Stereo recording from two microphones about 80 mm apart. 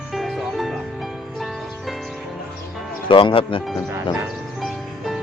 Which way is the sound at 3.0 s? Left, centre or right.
Left.